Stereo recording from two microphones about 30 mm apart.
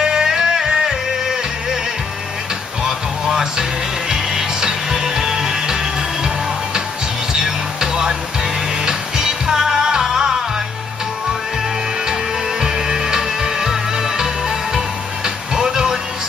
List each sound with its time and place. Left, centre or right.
0.0 s music: right
3.3 s music: right
7.3 s music: right
12.1 s music: right